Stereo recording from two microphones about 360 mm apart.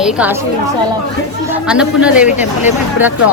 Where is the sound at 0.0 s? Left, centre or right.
Centre.